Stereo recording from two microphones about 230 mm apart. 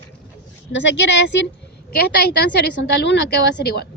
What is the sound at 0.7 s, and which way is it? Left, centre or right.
Speech, left.